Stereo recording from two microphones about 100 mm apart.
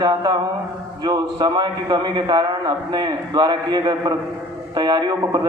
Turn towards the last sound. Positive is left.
turn(degrees=-40)  # may be behind; listen again after turning